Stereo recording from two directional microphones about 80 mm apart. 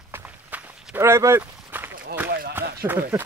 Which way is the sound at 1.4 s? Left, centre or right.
Right.